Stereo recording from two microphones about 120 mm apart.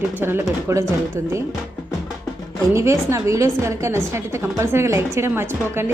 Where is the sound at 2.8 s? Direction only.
25° right (ahead or behind).